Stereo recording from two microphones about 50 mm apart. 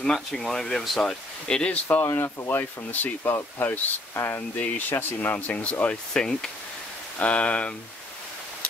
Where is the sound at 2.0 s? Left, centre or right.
Left.